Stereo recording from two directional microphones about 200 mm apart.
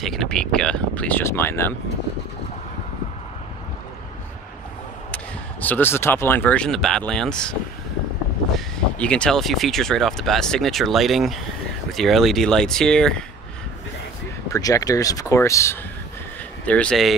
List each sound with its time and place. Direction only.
0.0 s speech: centre (ahead or behind)
5.1 s speech: 10° left (ahead or behind)
14.5 s speech: 15° left (ahead or behind)